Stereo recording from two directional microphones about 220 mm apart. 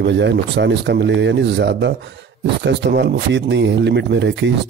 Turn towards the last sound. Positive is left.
turn(degrees=-55)  # may be behind; listen again after turning